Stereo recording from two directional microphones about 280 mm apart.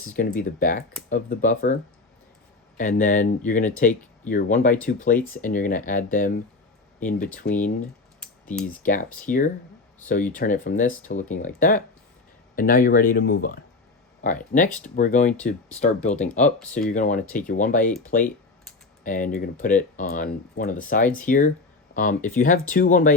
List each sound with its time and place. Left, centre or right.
0.2 s speech: left
8.2 s computer keyboard: centre
8.7 s speech: left